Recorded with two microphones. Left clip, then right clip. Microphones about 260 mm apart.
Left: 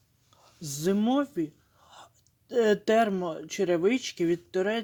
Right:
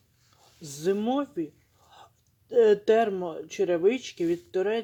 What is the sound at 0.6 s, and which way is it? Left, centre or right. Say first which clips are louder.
Speech: right 1 dB; left.